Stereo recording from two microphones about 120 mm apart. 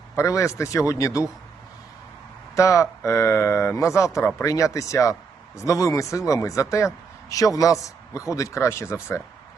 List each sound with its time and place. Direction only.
0.2 s speech: 25° left (ahead or behind)
2.6 s speech: 25° left (ahead or behind)